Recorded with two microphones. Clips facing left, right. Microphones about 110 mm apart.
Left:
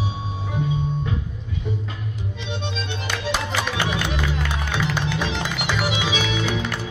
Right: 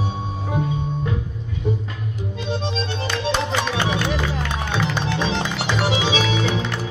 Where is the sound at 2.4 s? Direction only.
35° right (ahead or behind).